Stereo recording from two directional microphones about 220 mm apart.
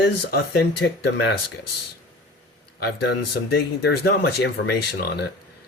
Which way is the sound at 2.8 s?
50° left (ahead or behind).